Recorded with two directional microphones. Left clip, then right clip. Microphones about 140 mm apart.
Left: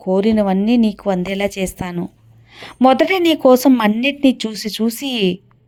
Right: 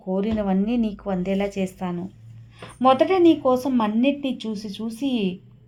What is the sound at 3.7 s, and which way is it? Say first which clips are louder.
A woman's voice: left 7 dB; 55° left (ahead or behind).